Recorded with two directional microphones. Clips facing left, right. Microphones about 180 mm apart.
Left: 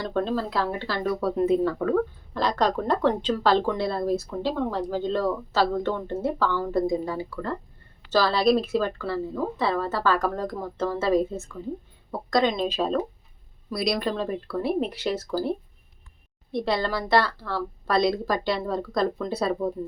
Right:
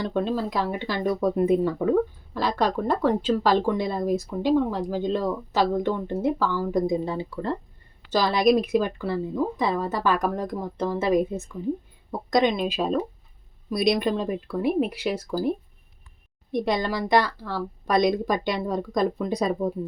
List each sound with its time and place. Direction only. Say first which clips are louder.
0.0 s speech: right 1 dB; 10° right (ahead or behind)
13.7 s speech: right 4 dB; 20° right (ahead or behind)